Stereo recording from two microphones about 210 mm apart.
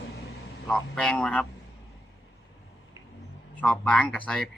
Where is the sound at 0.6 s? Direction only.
5° left (ahead or behind).